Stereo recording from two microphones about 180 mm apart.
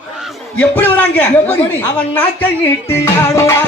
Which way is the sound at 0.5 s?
10° left (ahead or behind).